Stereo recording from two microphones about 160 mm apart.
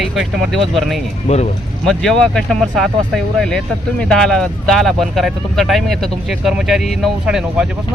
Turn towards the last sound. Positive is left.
turn(degrees=-5)  # may be behind; listen again after turning